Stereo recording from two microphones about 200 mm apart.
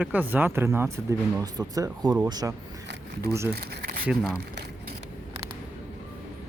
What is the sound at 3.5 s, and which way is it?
Speech, 50° right (ahead or behind).